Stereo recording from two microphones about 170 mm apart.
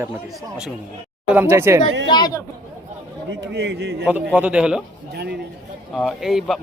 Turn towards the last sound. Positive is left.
turn(degrees=0)  # may be behind; listen again after turning